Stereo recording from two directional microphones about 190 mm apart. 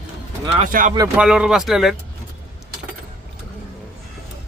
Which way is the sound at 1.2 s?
5° right (ahead or behind).